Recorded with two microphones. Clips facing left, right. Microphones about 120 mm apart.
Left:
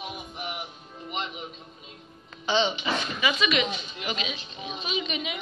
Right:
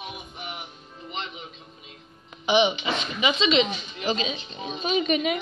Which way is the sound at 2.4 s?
15° right (ahead or behind).